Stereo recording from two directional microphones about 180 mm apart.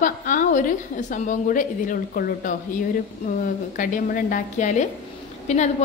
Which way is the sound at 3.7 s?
45° left (ahead or behind).